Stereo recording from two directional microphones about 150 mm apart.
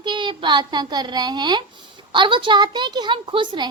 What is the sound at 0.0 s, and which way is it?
A child's voice, 30° right (ahead or behind).